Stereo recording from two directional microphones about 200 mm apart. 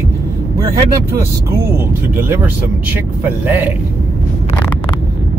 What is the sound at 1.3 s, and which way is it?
Speech, 10° right (ahead or behind).